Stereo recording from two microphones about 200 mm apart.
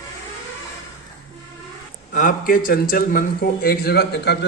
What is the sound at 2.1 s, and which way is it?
A man's voice, 45° left (ahead or behind).